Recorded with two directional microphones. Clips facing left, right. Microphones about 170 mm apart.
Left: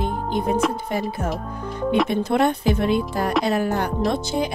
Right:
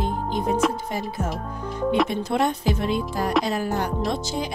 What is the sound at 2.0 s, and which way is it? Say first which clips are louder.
Speech: left 3 dB; 60° left (ahead or behind).